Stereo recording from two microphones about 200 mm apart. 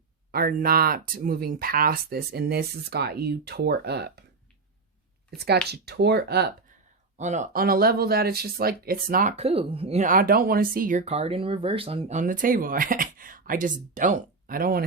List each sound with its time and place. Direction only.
0.3 s speech: 50° right (ahead or behind)
5.4 s speech: 55° right (ahead or behind)
7.2 s speech: 35° right (ahead or behind)
9.3 s speech: 30° right (ahead or behind); by 14.8 s 45° right (ahead or behind)